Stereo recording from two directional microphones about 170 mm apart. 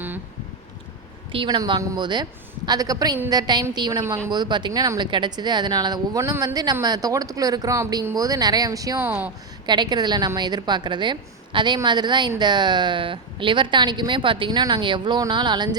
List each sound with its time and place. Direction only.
1.3 s speech: 30° right (ahead or behind); by 9.3 s 10° right (ahead or behind)
9.6 s speech: 25° right (ahead or behind)